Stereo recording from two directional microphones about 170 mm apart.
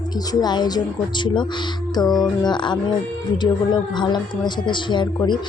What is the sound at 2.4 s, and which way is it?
Speech, 25° left (ahead or behind).